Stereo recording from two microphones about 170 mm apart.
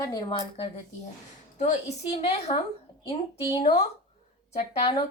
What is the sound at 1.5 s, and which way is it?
Speech, 45° left (ahead or behind).